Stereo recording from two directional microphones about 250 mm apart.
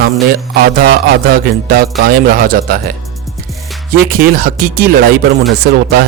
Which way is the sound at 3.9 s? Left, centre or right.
Right.